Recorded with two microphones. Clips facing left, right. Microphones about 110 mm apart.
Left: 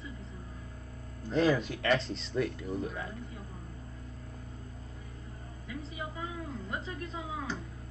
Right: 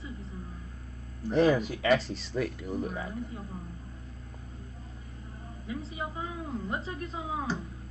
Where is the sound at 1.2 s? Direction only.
15° right (ahead or behind).